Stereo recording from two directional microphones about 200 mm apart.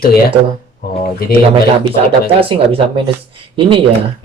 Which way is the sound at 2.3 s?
25° right (ahead or behind).